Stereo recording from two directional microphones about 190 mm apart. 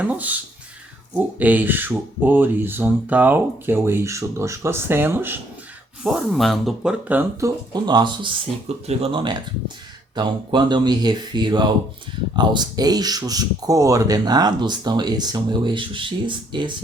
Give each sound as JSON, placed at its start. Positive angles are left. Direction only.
{"t": 0.0, "sound": "speech", "side_deg": -10}